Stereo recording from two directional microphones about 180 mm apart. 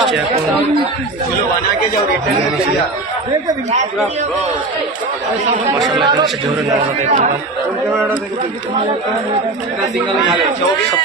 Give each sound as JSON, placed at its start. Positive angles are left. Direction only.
{"t": 5.9, "sound": "a man's voice", "side_deg": -25}